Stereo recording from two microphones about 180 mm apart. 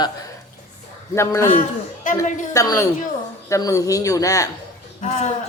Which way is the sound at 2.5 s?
20° left (ahead or behind).